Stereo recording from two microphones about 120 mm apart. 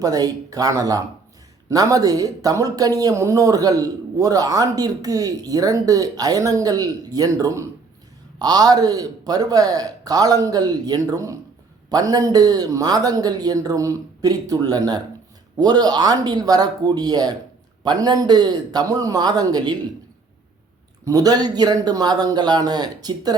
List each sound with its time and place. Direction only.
0.0 s speech: 30° right (ahead or behind)
21.0 s speech: 30° right (ahead or behind)